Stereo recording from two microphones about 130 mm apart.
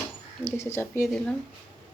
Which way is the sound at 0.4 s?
20° left (ahead or behind).